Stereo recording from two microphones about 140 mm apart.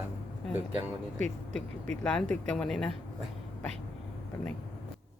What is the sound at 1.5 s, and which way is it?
Speech, 5° left (ahead or behind).